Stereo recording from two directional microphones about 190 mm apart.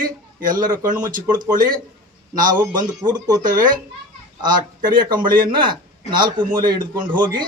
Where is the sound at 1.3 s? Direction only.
20° right (ahead or behind).